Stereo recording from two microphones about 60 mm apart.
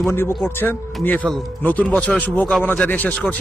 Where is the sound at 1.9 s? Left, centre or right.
Left.